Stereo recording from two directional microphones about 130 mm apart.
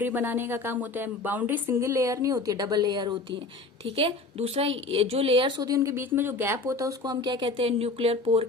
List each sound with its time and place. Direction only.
0.0 s speech: 15° right (ahead or behind); by 3.2 s 35° right (ahead or behind)
3.9 s a woman's voice: 50° right (ahead or behind)